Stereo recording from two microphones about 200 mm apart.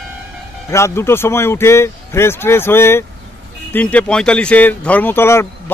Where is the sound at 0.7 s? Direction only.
15° left (ahead or behind).